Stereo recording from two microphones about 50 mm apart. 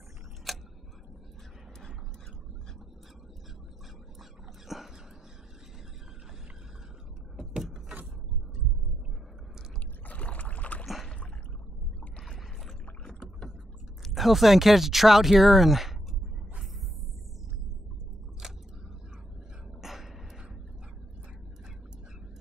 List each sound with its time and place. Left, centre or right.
0.5 s tick-tock: centre
4.6 s a sound: centre
7.3 s vehicle: centre
10.0 s rowboat: left
12.2 s rowboat: centre
14.0 s speech: centre
18.4 s a sound: centre
19.8 s throat clearing: centre